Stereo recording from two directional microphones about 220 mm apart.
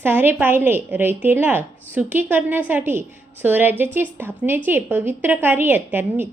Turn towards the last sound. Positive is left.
turn(degrees=-10)  # may be behind; listen again after turning